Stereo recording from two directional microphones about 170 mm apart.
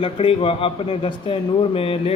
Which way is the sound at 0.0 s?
30° left (ahead or behind).